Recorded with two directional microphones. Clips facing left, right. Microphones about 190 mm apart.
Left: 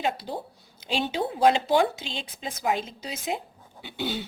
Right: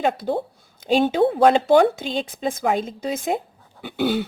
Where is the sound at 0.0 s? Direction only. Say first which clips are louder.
Right 7 dB; 50° right (ahead or behind).